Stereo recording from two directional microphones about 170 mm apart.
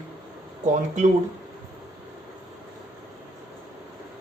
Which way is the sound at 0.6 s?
45° right (ahead or behind).